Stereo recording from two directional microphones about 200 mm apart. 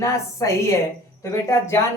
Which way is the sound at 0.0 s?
15° left (ahead or behind).